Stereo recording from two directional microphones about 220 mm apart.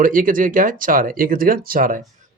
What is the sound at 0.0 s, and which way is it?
Speech, 40° right (ahead or behind).